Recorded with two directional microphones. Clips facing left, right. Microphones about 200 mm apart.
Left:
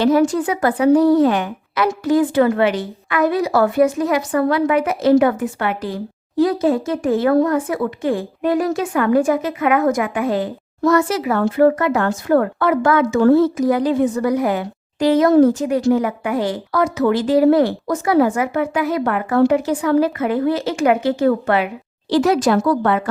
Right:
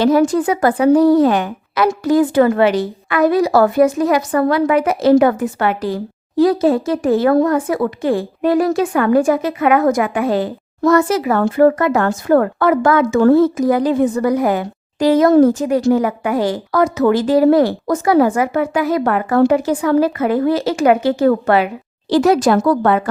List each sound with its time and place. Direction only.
0.0 s speech: 40° right (ahead or behind)
10.8 s speech: 45° right (ahead or behind)